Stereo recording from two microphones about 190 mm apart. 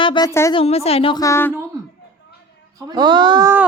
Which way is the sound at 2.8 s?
20° right (ahead or behind).